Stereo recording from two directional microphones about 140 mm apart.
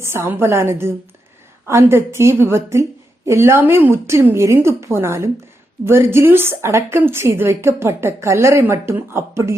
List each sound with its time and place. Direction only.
0.0 s a woman's voice: 20° right (ahead or behind)